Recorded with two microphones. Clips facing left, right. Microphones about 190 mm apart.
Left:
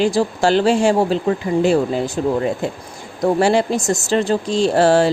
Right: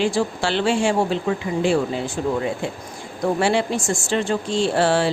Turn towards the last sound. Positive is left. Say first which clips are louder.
# left 5 dB
turn(degrees=40)  # may be behind; listen again after turning